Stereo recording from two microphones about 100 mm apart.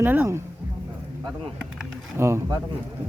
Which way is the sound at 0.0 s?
20° right (ahead or behind).